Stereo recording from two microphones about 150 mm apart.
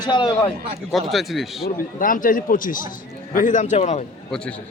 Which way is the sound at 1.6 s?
65° left (ahead or behind).